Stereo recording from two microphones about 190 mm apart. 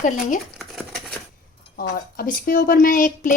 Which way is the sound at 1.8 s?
50° left (ahead or behind).